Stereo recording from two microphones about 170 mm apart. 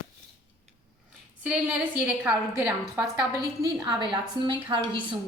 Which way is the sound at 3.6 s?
20° right (ahead or behind).